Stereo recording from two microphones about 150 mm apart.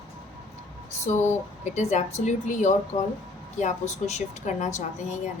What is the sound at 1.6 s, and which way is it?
A woman's voice, 50° left (ahead or behind).